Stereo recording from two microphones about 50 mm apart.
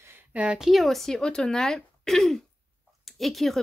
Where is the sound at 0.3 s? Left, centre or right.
Right.